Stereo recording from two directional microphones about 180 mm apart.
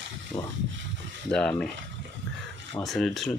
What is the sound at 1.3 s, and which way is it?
Speech, 5° left (ahead or behind).